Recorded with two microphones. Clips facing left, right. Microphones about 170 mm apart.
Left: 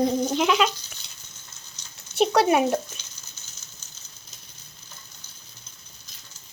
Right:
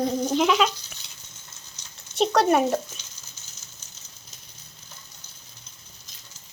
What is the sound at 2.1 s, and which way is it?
Speech, 5° left (ahead or behind).